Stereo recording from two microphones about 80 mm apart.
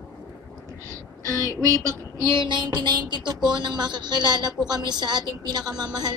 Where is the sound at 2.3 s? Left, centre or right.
Right.